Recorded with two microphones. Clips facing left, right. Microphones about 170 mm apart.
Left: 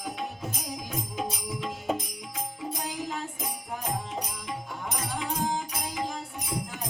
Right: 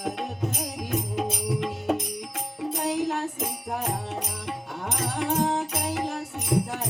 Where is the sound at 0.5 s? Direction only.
65° right (ahead or behind).